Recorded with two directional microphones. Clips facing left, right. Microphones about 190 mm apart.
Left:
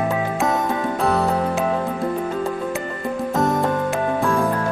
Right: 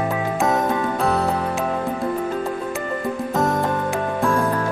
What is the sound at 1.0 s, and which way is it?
Music, centre (ahead or behind).